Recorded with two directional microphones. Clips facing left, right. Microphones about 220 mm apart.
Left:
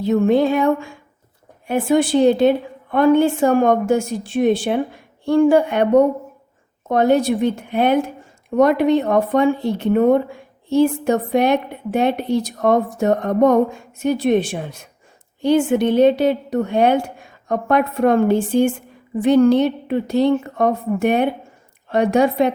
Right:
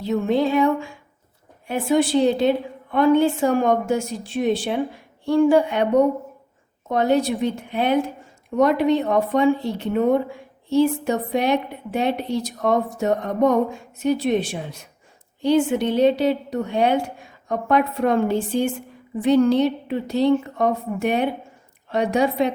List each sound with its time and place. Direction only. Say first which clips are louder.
0.0 s a woman's voice: left 5 dB; 50° left (ahead or behind)